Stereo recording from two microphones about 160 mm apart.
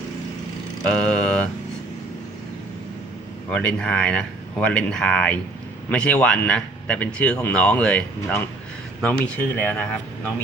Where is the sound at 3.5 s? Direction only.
5° left (ahead or behind).